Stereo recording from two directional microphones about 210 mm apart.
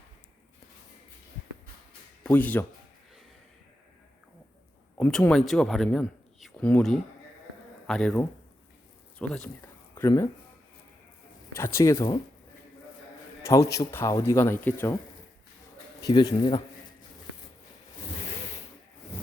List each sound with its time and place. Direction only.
2.2 s speech: 10° left (ahead or behind)
4.9 s speech: 5° left (ahead or behind)
11.5 s speech: 15° left (ahead or behind)
13.4 s speech: 15° left (ahead or behind)
16.0 s speech: 20° left (ahead or behind)